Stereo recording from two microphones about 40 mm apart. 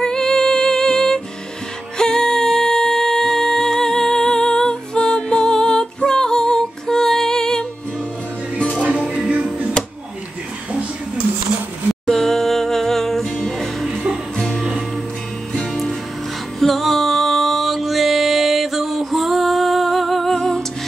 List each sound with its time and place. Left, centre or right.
0.0 s music: centre
9.0 s music: centre
12.1 s music: centre
14.4 s music: centre